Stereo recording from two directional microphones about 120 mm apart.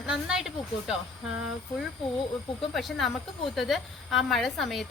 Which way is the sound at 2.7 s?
Centre (ahead or behind).